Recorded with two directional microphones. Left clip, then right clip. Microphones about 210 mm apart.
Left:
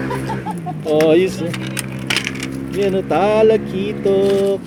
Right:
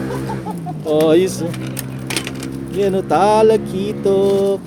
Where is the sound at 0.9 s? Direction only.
5° right (ahead or behind).